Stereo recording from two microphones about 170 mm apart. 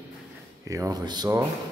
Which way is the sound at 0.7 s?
20° right (ahead or behind).